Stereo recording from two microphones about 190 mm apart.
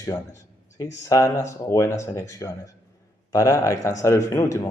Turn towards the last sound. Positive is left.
turn(degrees=15)  # may be behind; listen again after turning